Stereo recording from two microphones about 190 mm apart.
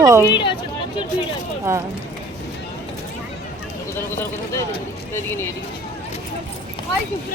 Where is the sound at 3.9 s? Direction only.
10° left (ahead or behind).